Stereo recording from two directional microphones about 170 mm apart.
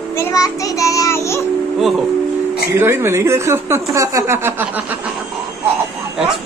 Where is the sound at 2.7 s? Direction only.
15° right (ahead or behind).